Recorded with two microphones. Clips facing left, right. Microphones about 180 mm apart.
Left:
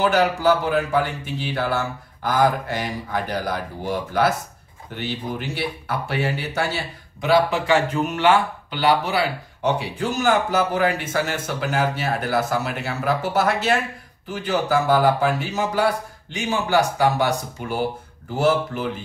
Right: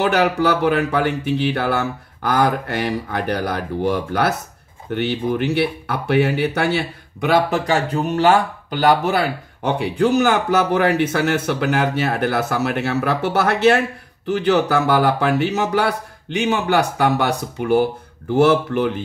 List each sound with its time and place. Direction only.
0.0 s speech: 65° right (ahead or behind)